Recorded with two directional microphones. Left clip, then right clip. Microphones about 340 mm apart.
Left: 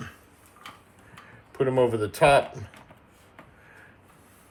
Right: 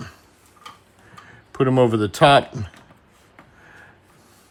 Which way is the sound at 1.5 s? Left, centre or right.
Centre.